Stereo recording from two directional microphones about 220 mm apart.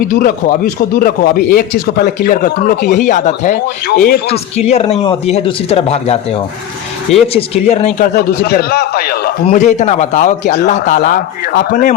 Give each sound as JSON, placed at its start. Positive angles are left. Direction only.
{"t": 0.1, "sound": "a man's voice", "side_deg": 40}
{"t": 4.3, "sound": "speech", "side_deg": 25}
{"t": 8.1, "sound": "a man's voice", "side_deg": 45}